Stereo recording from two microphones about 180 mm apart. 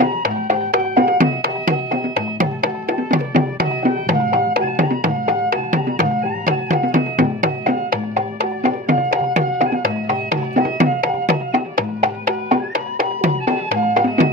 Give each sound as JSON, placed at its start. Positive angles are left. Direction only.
{"t": 0.0, "sound": "music", "side_deg": -45}
{"t": 13.8, "sound": "music", "side_deg": -45}